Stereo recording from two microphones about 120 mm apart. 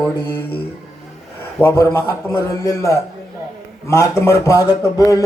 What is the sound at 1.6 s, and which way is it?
A man's voice, 20° left (ahead or behind).